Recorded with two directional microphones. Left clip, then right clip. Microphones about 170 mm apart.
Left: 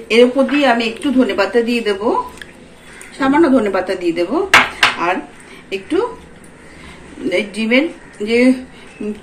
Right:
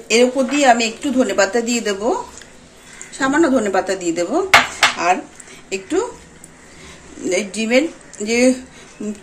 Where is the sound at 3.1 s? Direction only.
50° right (ahead or behind).